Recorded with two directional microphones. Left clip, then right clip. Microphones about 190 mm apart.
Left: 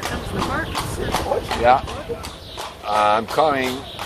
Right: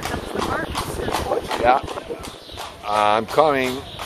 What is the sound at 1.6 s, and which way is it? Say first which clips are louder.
Speech: left 2 dB; 30° right (ahead or behind).